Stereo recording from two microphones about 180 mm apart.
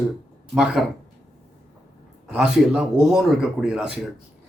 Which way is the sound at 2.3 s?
5° right (ahead or behind).